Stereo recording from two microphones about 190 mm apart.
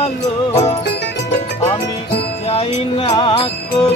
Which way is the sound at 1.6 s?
30° left (ahead or behind).